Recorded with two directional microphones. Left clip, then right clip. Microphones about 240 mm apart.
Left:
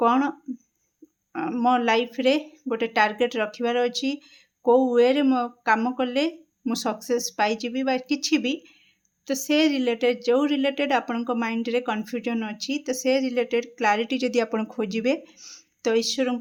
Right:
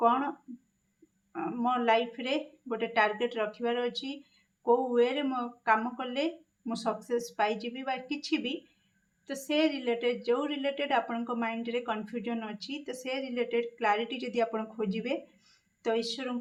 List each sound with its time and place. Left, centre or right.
0.0 s a woman's voice: left